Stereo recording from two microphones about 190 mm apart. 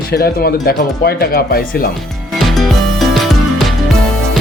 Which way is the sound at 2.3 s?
Centre (ahead or behind).